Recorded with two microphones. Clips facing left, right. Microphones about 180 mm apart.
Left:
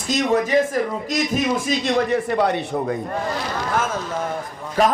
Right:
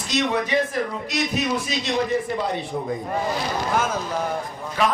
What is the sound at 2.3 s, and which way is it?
Speech, 70° left (ahead or behind).